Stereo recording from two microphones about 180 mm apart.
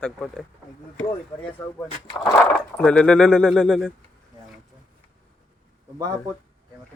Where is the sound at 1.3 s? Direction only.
15° left (ahead or behind).